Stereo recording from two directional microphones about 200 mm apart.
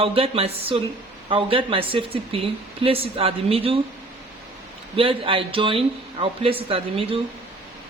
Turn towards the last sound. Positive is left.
turn(degrees=-30)  # may be behind; listen again after turning